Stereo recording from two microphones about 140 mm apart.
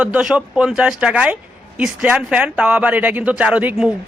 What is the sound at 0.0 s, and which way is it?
A man's voice, 5° right (ahead or behind).